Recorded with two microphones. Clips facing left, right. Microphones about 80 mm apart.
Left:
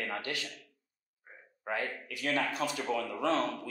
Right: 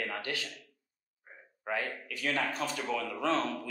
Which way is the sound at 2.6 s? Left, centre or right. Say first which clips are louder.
Left 1 dB; left.